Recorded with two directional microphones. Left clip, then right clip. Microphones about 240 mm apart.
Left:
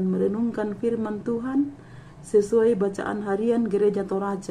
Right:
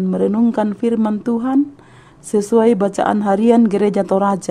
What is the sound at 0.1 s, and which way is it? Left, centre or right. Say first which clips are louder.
Speech: right 11 dB; right.